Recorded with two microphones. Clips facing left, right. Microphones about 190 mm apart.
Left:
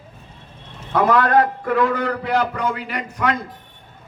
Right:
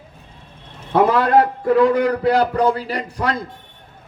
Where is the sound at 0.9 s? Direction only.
30° right (ahead or behind).